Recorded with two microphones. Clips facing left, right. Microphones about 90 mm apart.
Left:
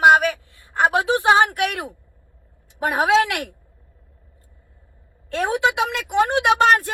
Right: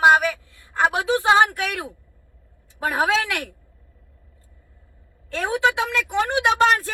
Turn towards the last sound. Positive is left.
turn(degrees=20)  # may be behind; listen again after turning